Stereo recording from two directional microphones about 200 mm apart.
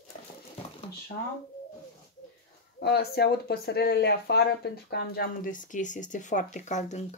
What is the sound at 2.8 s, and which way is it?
Speech, 55° left (ahead or behind).